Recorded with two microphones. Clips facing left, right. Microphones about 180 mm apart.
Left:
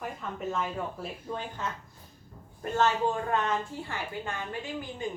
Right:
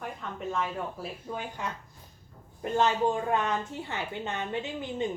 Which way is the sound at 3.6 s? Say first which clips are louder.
Right 1 dB; 20° right (ahead or behind).